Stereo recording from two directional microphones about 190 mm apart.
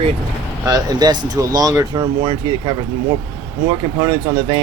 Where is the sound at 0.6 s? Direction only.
20° right (ahead or behind).